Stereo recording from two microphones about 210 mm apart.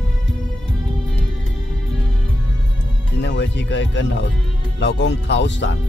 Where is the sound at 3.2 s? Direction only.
55° left (ahead or behind).